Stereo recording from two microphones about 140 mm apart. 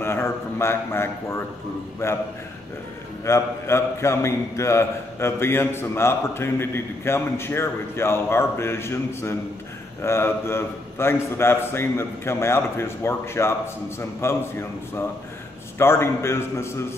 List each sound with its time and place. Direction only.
0.0 s a man's voice: 15° left (ahead or behind)
3.3 s a man's voice: 20° left (ahead or behind)